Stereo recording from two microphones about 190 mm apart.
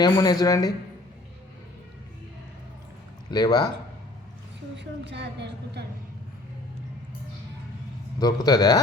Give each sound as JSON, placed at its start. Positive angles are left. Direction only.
{"t": 0.0, "sound": "a woman's voice", "side_deg": 20}
{"t": 3.2, "sound": "a woman's voice", "side_deg": 20}
{"t": 4.8, "sound": "a woman's voice", "side_deg": -65}
{"t": 8.2, "sound": "a woman's voice", "side_deg": 20}